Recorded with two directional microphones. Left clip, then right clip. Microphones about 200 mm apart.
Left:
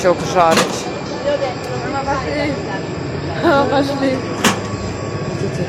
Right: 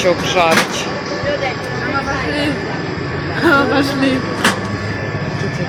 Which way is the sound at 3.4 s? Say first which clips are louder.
Right 1 dB; 50° right (ahead or behind).